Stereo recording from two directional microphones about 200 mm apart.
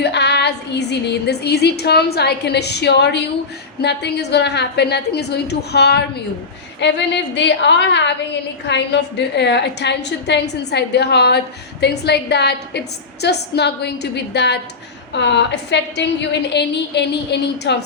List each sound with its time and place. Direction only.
0.0 s a woman's voice: 55° left (ahead or behind)